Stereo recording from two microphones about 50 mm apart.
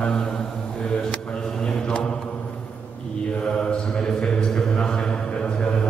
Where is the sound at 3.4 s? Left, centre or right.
Centre.